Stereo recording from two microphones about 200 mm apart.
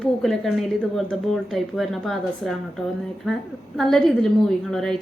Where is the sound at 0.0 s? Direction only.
Centre (ahead or behind).